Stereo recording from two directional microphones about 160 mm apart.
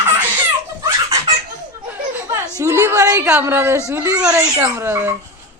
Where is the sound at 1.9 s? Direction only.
10° right (ahead or behind).